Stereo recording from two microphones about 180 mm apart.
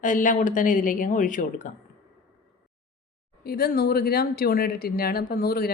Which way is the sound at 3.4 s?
55° left (ahead or behind).